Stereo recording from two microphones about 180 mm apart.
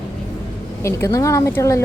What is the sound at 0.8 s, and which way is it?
Speech, 15° left (ahead or behind).